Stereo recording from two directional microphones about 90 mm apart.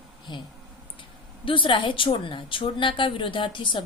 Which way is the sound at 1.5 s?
70° left (ahead or behind).